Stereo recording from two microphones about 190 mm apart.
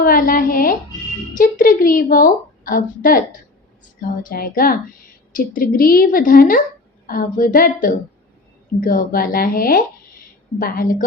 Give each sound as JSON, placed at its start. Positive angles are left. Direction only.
{"t": 0.0, "sound": "a woman's voice", "side_deg": 45}